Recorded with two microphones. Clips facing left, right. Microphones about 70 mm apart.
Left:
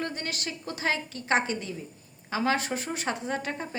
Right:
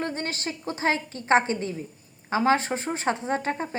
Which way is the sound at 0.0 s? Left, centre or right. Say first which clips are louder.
Right 3 dB; right.